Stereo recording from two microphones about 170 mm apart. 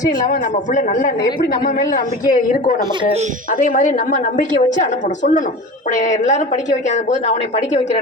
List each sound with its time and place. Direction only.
0.3 s a woman's voice: 50° left (ahead or behind)
3.0 s speech: 35° right (ahead or behind)
3.6 s a woman's voice: 50° left (ahead or behind)